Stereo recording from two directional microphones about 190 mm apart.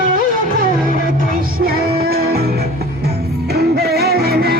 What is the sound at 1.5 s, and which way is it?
Music, 50° right (ahead or behind).